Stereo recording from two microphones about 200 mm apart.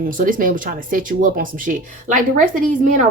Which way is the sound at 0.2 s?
45° right (ahead or behind).